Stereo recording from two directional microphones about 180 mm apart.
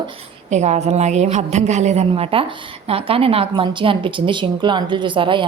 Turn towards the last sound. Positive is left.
turn(degrees=-25)  # may be behind; listen again after turning